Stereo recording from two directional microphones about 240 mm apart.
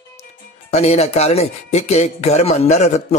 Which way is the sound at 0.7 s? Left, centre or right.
Left.